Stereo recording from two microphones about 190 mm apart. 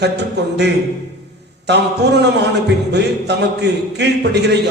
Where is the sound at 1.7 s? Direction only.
65° right (ahead or behind).